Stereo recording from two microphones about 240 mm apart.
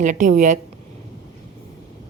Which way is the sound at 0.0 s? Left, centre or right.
Right.